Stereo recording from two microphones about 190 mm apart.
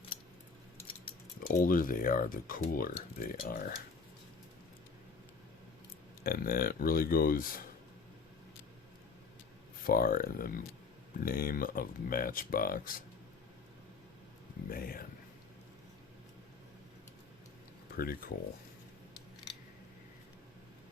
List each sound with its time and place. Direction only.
1.5 s speech: 45° left (ahead or behind)
6.2 s speech: 50° left (ahead or behind)
9.8 s speech: 50° left (ahead or behind)
14.7 s speech: 50° left (ahead or behind)
17.9 s speech: 50° left (ahead or behind)